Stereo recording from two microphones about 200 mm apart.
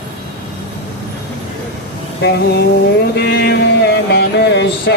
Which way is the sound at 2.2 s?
55° left (ahead or behind).